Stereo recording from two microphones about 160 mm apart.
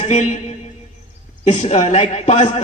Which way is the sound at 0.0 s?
45° left (ahead or behind).